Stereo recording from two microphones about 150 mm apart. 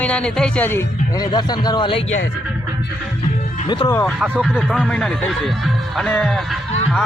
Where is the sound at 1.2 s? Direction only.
30° left (ahead or behind).